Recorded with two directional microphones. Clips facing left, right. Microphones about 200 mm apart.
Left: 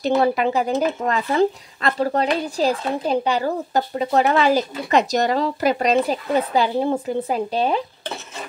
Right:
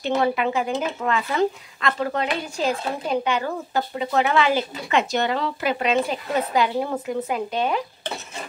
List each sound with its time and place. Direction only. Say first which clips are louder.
0.0 s speech: left 3 dB; 35° left (ahead or behind)